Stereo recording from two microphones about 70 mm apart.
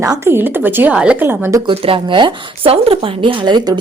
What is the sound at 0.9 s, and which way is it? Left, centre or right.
Speech, centre.